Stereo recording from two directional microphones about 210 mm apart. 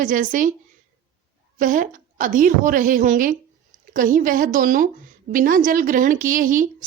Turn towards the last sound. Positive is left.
turn(degrees=-40)  # may be behind; listen again after turning